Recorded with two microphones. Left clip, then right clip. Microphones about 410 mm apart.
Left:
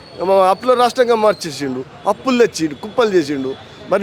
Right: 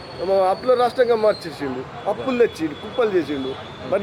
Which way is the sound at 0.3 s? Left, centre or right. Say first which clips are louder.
Left 5 dB; left.